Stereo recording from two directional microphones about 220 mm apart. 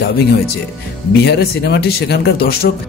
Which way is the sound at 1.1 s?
50° left (ahead or behind).